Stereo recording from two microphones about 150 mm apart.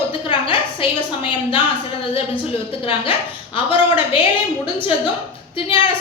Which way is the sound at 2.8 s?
35° left (ahead or behind).